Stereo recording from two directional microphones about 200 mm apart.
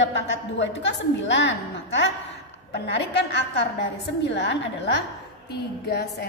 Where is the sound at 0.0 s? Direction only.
65° left (ahead or behind).